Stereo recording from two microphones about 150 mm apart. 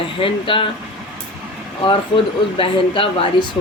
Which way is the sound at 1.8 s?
35° left (ahead or behind).